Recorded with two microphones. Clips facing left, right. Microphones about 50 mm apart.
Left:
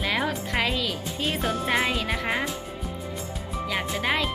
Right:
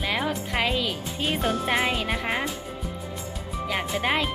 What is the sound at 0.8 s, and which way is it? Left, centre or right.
Speech, centre.